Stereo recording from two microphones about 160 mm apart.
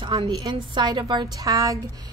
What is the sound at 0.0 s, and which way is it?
Speech, 25° right (ahead or behind).